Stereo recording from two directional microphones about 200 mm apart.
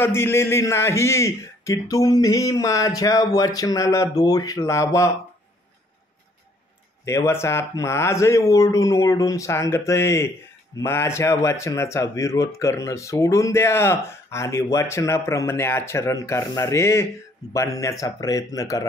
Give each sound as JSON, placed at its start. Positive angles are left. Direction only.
{"t": 0.0, "sound": "speech", "side_deg": 10}
{"t": 7.1, "sound": "speech", "side_deg": 15}